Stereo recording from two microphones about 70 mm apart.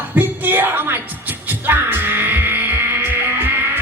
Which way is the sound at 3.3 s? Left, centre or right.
Right.